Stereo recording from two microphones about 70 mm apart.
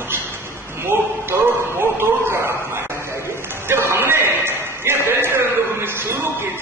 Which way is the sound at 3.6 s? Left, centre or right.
Right.